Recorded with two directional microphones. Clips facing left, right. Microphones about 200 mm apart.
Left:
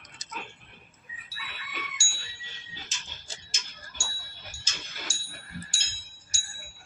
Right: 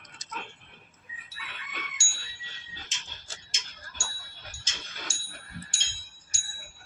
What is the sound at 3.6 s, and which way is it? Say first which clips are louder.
Tick-tock: left 1 dB; 20° right (ahead or behind).